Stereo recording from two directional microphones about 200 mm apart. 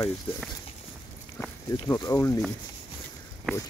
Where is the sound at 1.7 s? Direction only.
15° left (ahead or behind).